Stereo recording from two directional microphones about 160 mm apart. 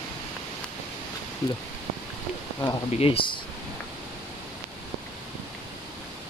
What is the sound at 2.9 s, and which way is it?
Speech, 35° left (ahead or behind).